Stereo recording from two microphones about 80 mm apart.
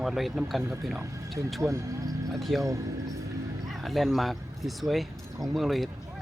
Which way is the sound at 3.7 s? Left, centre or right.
Centre.